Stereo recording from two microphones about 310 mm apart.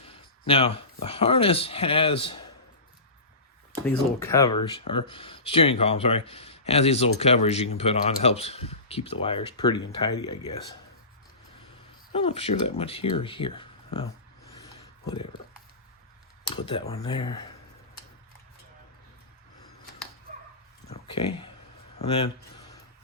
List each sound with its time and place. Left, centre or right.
0.4 s speech: centre
3.8 s speech: centre
12.1 s speech: centre
16.5 s speech: centre
20.9 s a sound: centre
21.9 s speech: centre